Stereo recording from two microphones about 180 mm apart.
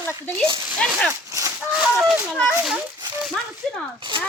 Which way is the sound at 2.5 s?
5° right (ahead or behind).